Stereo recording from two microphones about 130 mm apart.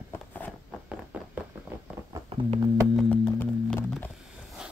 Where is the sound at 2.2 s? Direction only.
45° right (ahead or behind).